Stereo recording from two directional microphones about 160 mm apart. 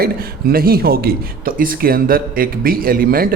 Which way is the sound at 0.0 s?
70° right (ahead or behind).